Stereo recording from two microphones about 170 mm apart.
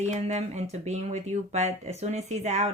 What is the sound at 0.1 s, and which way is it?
Speech, 40° right (ahead or behind).